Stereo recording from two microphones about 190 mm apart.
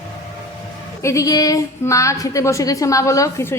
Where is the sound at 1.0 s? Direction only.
15° left (ahead or behind).